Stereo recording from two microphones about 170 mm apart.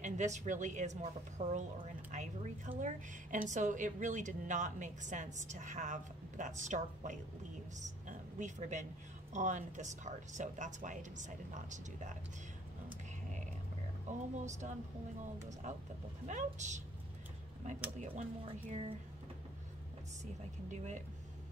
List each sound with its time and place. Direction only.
0.0 s a woman's voice: 45° right (ahead or behind)
8.1 s a sound: 45° right (ahead or behind)
9.3 s a woman's voice: 45° right (ahead or behind)
14.0 s a woman's voice: 45° right (ahead or behind)
16.3 s a woman's voice: 45° right (ahead or behind)
18.7 s speech: 40° right (ahead or behind)
20.7 s a woman's voice: 45° right (ahead or behind)